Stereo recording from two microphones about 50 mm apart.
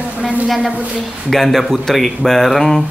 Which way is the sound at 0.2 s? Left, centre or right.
Right.